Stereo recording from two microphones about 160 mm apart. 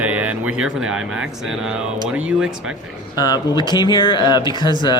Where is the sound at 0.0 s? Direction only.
10° right (ahead or behind).